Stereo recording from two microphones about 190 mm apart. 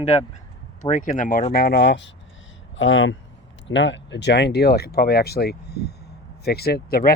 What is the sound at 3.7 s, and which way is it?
Speech, 75° left (ahead or behind).